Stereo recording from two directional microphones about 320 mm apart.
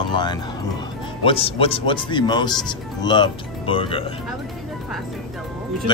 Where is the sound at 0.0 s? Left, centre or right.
Centre.